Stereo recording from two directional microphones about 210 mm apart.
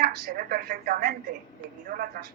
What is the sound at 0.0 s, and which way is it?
A woman's voice, 45° right (ahead or behind).